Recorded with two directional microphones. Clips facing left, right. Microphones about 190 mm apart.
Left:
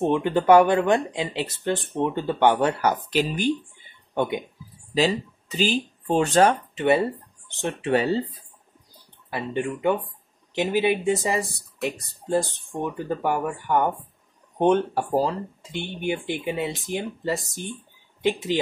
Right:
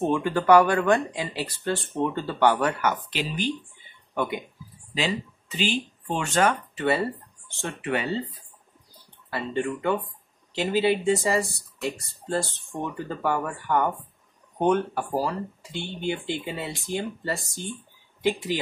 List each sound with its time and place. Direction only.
0.1 s speech: 20° left (ahead or behind)
2.9 s speech: 45° left (ahead or behind)
4.1 s speech: 25° left (ahead or behind)
4.9 s speech: 40° left (ahead or behind)
6.7 s speech: 20° left (ahead or behind)
7.9 s speech: 35° left (ahead or behind)
9.3 s speech: 15° left (ahead or behind)